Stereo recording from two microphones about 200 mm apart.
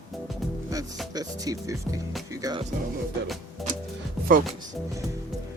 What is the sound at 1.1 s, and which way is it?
Speech, 20° right (ahead or behind).